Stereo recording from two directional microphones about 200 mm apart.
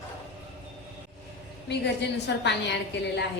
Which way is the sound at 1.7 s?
60° left (ahead or behind).